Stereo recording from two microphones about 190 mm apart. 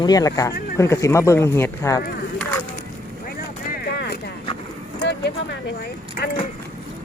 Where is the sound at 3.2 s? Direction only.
50° left (ahead or behind).